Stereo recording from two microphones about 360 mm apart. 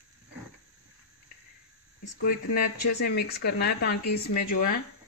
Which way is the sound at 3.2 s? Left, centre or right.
Left.